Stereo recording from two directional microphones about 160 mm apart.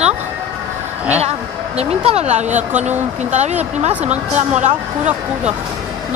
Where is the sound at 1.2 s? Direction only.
40° right (ahead or behind).